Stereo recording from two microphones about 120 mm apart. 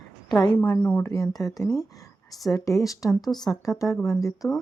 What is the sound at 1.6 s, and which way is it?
Speech, 25° left (ahead or behind).